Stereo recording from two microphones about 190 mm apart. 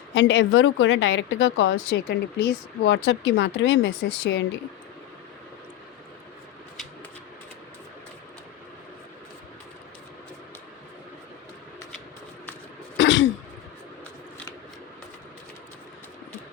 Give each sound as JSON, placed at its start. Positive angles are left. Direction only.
{"t": 0.1, "sound": "a woman's voice", "side_deg": 70}
{"t": 13.0, "sound": "throat clearing", "side_deg": 75}